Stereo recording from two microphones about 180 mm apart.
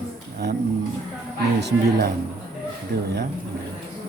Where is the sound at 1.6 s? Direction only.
70° right (ahead or behind).